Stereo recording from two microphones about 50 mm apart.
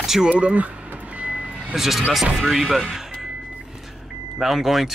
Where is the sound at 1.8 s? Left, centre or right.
Centre.